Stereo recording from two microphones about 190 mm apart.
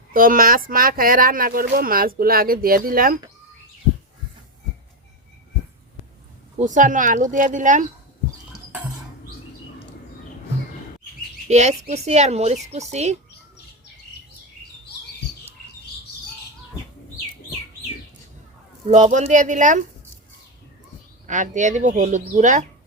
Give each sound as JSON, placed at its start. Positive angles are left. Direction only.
{"t": 0.1, "sound": "speech", "side_deg": -45}
{"t": 6.6, "sound": "speech", "side_deg": -40}
{"t": 11.4, "sound": "speech", "side_deg": -35}
{"t": 18.9, "sound": "speech", "side_deg": -40}
{"t": 21.2, "sound": "speech", "side_deg": -40}